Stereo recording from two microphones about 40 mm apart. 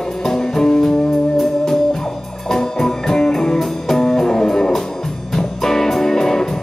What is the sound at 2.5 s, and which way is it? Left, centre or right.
Music, centre.